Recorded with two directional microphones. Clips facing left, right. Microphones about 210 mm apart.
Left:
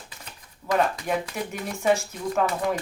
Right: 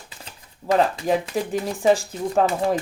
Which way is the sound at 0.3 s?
30° right (ahead or behind).